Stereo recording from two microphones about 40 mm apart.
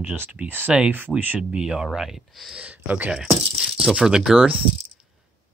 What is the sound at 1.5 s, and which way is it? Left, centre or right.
Speech, centre.